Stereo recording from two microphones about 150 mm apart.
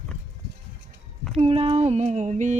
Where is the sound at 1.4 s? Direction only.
40° right (ahead or behind).